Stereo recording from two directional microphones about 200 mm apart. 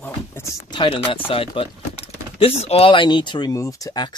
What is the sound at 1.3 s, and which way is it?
Speech, 25° left (ahead or behind).